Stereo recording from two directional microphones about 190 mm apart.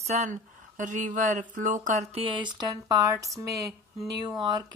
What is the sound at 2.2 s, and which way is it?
Speech, 25° right (ahead or behind).